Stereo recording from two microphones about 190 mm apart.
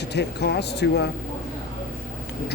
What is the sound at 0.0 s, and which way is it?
Speech, 65° left (ahead or behind).